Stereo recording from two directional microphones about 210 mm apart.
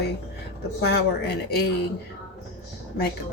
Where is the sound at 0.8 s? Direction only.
50° left (ahead or behind).